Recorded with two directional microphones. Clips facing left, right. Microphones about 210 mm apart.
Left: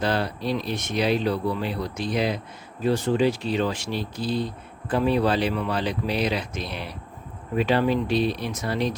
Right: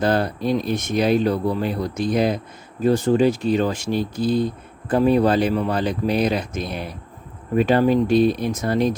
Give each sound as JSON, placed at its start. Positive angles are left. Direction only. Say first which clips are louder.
{"t": 0.0, "sound": "speech", "louder": "right 5 dB", "side_deg": -45}